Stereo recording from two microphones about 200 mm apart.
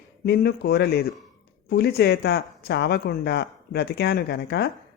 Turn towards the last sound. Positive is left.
turn(degrees=55)  # may be behind; listen again after turning